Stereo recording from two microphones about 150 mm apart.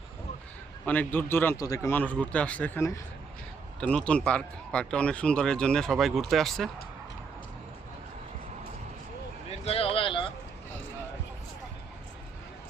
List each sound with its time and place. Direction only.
0.9 s a man's voice: 10° left (ahead or behind)
3.8 s a man's voice: 5° left (ahead or behind)
9.5 s a sound: 40° left (ahead or behind)